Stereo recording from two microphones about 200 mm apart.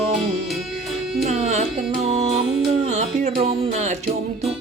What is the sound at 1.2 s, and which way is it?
Music, 35° right (ahead or behind).